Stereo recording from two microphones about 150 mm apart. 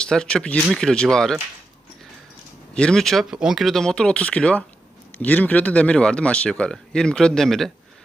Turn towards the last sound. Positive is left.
turn(degrees=0)  # may be behind; listen again after turning